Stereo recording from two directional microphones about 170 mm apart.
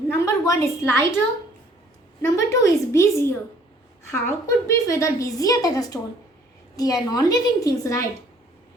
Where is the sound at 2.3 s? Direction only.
20° left (ahead or behind).